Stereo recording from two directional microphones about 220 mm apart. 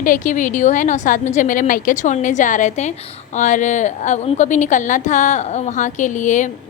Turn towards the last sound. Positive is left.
turn(degrees=35)  # may be behind; listen again after turning